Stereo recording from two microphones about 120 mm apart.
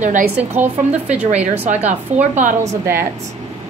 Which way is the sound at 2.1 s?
75° right (ahead or behind).